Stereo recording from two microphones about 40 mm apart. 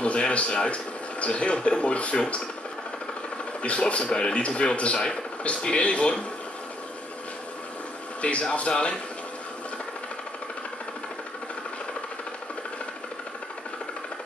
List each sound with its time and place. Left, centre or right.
0.0 s a sound: left
1.2 s speech: left
3.6 s speech: left
8.2 s speech: left